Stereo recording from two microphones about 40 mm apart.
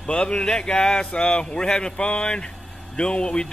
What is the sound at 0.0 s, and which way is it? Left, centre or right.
Speech, left.